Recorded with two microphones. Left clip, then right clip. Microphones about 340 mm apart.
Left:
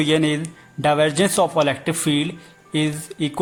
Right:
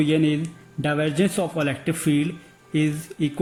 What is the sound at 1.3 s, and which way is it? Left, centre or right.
Speech, left.